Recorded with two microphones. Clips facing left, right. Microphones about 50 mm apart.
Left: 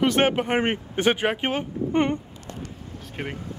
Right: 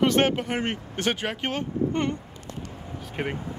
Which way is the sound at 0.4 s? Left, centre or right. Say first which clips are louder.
Left 5 dB; left.